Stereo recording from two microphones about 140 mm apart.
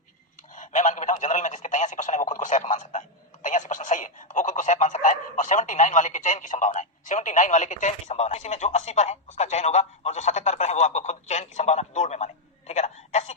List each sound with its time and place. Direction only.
0.5 s speech: 65° left (ahead or behind)
3.4 s telephone: 60° left (ahead or behind)